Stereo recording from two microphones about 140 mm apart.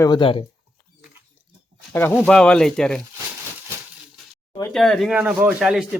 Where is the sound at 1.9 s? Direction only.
15° left (ahead or behind).